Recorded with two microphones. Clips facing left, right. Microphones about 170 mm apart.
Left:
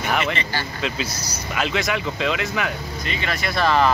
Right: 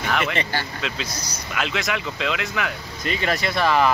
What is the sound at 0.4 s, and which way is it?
Speech, 55° right (ahead or behind).